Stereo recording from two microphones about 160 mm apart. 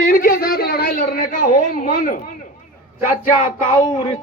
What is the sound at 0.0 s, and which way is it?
Speech, 60° left (ahead or behind).